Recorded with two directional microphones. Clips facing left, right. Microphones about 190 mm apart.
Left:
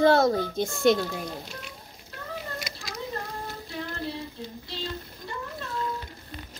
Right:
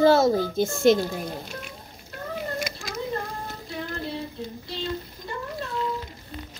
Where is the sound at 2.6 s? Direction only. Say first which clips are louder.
Right 6 dB; 50° right (ahead or behind).